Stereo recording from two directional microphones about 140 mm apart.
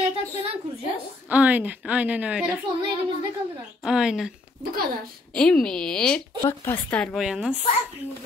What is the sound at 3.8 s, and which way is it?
Speech, 5° right (ahead or behind).